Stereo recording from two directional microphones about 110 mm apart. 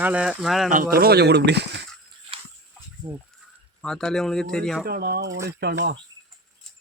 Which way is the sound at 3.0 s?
45° right (ahead or behind).